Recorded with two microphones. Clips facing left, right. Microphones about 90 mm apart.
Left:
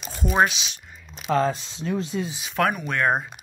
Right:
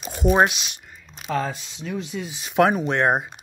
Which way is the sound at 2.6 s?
25° right (ahead or behind).